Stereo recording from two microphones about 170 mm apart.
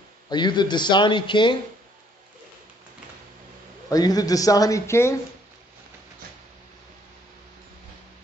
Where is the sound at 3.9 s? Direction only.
20° left (ahead or behind).